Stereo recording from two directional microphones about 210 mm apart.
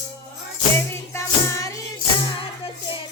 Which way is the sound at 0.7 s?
10° left (ahead or behind).